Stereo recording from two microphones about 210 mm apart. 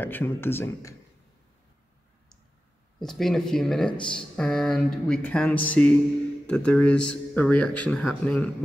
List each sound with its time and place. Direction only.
0.0 s speech: 10° left (ahead or behind)
3.0 s a man's voice: centre (ahead or behind)
3.9 s speech: 20° left (ahead or behind)
4.4 s a man's voice: 5° left (ahead or behind)